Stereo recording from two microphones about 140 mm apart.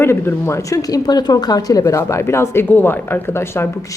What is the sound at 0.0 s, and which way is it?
A woman's voice, 20° left (ahead or behind).